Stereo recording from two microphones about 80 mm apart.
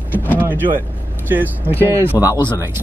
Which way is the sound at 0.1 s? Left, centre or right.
Left.